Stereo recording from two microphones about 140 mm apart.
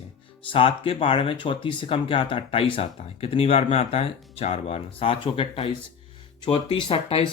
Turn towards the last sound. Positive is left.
turn(degrees=40)  # may be behind; listen again after turning